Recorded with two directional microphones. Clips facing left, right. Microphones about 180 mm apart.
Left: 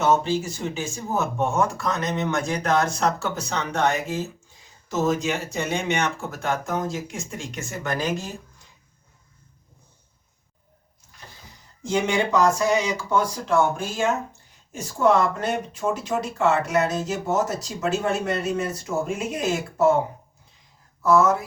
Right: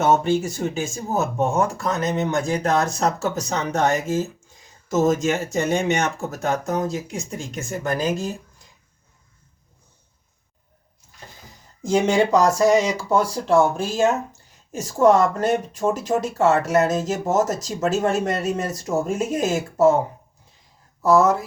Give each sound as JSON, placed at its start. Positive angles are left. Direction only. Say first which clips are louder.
{"t": 0.0, "sound": "speech", "louder": "right 3 dB", "side_deg": -45}
{"t": 11.9, "sound": "speech", "louder": "right 5 dB", "side_deg": -40}
{"t": 21.0, "sound": "speech", "louder": "right 2 dB", "side_deg": -35}